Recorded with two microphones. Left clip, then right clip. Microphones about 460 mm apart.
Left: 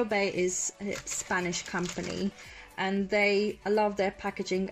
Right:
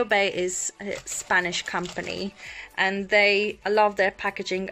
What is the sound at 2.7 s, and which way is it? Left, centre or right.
Speech, right.